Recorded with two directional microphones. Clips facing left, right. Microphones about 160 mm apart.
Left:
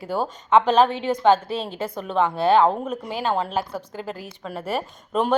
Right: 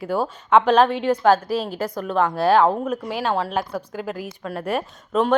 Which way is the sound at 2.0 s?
Centre (ahead or behind).